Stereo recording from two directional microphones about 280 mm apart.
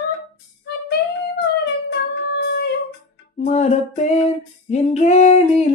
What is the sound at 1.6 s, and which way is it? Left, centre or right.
Music, left.